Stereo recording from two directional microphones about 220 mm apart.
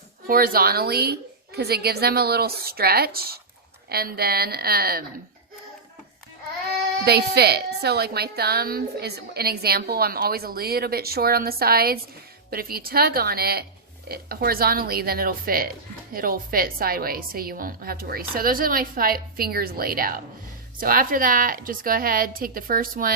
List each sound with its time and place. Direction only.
0.3 s a woman's voice: 40° right (ahead or behind)
7.0 s a woman's voice: 45° right (ahead or behind)